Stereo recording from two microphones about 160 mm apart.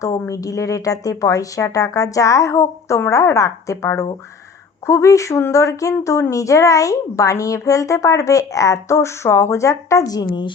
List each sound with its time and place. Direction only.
0.0 s speech: 20° left (ahead or behind)